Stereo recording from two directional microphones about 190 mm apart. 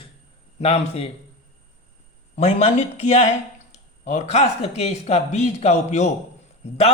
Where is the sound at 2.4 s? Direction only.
35° left (ahead or behind).